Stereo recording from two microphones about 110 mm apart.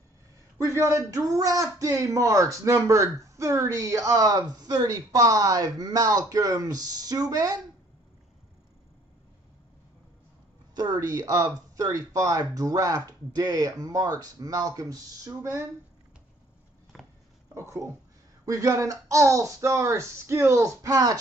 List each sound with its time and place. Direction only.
0.7 s speech: 30° right (ahead or behind)
10.7 s speech: 40° right (ahead or behind)
16.9 s a sound: centre (ahead or behind)
17.6 s speech: 25° right (ahead or behind)